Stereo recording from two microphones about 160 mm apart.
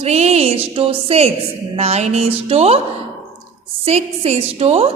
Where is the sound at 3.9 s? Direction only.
40° right (ahead or behind).